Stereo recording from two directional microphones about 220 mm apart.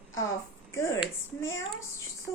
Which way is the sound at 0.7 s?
15° left (ahead or behind).